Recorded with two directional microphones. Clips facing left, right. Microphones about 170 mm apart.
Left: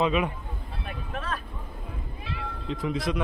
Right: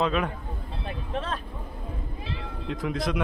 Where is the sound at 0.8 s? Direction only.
30° right (ahead or behind).